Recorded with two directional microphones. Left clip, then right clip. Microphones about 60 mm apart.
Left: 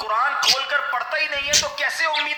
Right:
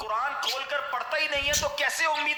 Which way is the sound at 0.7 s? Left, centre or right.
Centre.